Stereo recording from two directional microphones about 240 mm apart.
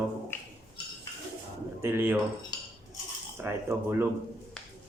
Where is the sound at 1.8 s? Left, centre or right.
Centre.